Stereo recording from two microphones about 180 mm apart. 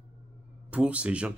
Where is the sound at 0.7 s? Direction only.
5° right (ahead or behind).